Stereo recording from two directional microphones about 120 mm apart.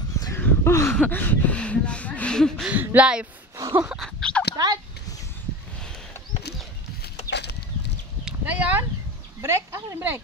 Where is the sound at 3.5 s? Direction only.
25° right (ahead or behind).